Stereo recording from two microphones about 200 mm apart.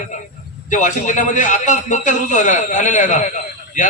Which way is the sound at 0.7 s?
40° left (ahead or behind).